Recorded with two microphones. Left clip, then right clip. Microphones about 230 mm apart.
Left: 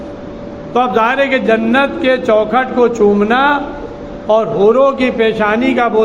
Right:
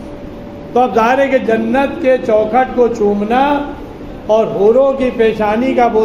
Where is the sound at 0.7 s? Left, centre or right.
Left.